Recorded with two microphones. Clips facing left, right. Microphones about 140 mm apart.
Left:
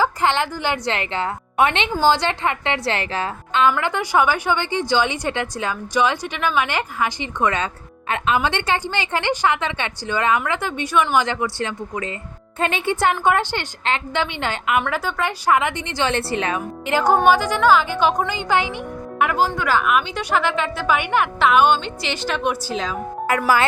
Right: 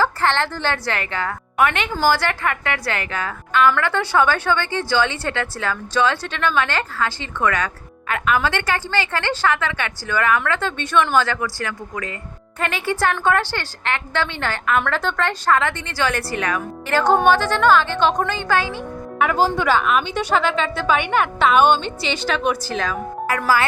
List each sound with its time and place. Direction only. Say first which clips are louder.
0.0 s a woman's voice: even; 15° left (ahead or behind)
19.4 s speech: right 4 dB; 30° right (ahead or behind)
19.8 s a woman's voice: even; 5° left (ahead or behind)